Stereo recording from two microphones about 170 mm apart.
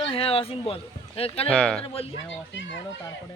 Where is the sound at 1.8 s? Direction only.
35° left (ahead or behind).